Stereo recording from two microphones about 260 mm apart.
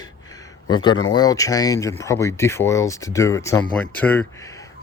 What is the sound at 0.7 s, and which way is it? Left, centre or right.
Speech, centre.